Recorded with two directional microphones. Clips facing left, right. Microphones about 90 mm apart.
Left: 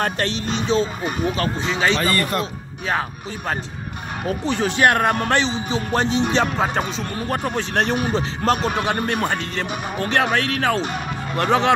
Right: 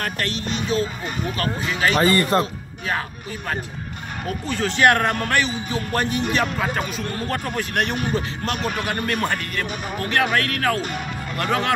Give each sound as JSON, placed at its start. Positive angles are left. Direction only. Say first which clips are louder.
{"t": 0.5, "sound": "speech", "louder": "left 3 dB", "side_deg": 30}
{"t": 2.0, "sound": "speech", "louder": "right 3 dB", "side_deg": -30}
{"t": 4.5, "sound": "speech", "louder": "even", "side_deg": 20}
{"t": 7.2, "sound": "speech", "louder": "left 4 dB", "side_deg": 20}
{"t": 7.7, "sound": "speech", "louder": "left 2 dB", "side_deg": 30}